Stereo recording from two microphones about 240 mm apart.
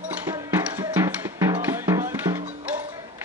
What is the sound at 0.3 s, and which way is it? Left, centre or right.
Music, centre.